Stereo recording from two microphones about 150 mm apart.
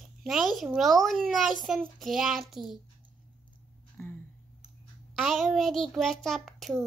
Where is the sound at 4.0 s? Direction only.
15° left (ahead or behind).